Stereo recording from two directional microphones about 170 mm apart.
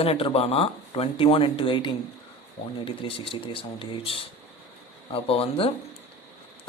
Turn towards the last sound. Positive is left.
turn(degrees=35)  # may be behind; listen again after turning